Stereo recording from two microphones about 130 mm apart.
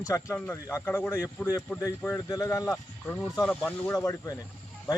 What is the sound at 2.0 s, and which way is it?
Speech, 10° left (ahead or behind).